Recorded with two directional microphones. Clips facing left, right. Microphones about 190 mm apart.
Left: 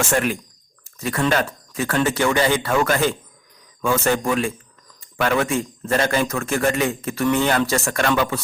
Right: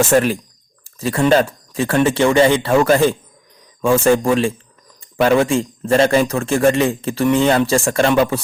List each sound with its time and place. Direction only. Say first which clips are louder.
0.1 s speech: right 6 dB; 35° right (ahead or behind)
0.9 s a sound: right 5 dB; 30° right (ahead or behind)
1.2 s a man's voice: right 7 dB; 30° right (ahead or behind)